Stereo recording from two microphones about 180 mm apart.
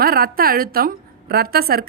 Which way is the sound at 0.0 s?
55° right (ahead or behind).